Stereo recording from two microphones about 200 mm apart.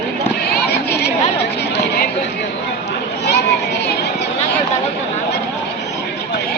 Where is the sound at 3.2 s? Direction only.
60° left (ahead or behind).